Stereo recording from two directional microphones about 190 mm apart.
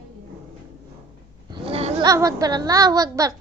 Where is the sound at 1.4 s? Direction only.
30° right (ahead or behind).